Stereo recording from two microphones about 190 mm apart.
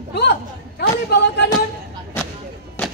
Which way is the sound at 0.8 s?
60° left (ahead or behind).